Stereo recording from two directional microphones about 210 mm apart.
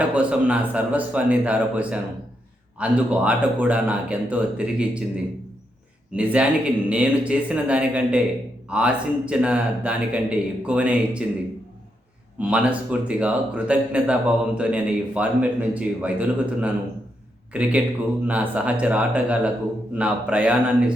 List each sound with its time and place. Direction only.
0.1 s a man's voice: 5° right (ahead or behind)
6.1 s speech: 5° right (ahead or behind)
12.4 s a man's voice: 5° right (ahead or behind)